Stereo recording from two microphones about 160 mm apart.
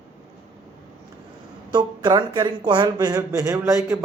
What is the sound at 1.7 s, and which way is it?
Speech, 25° right (ahead or behind).